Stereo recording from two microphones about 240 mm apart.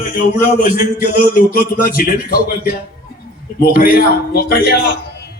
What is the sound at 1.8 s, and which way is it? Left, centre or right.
Speech, left.